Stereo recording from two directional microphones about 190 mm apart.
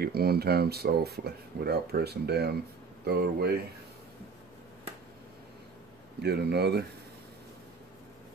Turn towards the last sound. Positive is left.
turn(degrees=-60)  # may be behind; listen again after turning